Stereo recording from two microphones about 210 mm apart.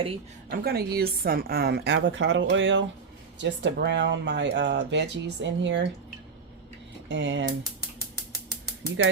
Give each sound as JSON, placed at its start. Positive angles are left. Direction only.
{"t": 0.5, "sound": "a woman's voice", "side_deg": -45}
{"t": 7.1, "sound": "speech", "side_deg": -60}